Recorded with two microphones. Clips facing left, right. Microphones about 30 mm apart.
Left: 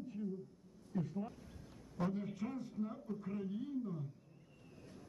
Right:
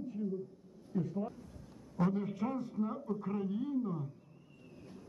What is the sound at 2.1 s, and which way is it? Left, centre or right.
A man's voice, centre.